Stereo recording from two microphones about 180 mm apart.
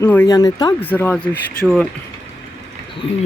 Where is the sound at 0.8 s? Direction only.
10° left (ahead or behind).